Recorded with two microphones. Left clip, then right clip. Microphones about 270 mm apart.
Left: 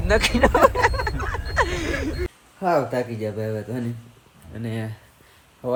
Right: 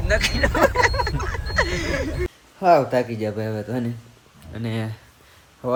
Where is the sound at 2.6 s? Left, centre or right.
Centre.